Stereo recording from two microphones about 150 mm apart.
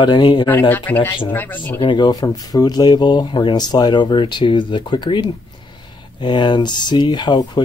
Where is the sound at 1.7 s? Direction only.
30° left (ahead or behind).